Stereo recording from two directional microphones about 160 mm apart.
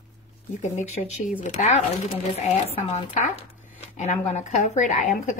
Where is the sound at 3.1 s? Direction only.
40° left (ahead or behind).